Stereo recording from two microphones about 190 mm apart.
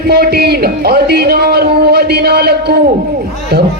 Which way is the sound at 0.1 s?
55° right (ahead or behind).